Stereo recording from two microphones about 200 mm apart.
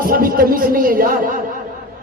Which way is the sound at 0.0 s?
45° right (ahead or behind).